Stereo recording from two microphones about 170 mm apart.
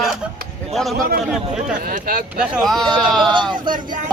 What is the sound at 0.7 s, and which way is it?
Speech, centre (ahead or behind).